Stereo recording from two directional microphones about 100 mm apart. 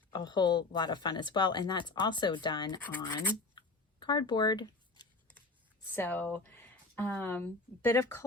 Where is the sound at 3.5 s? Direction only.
45° left (ahead or behind).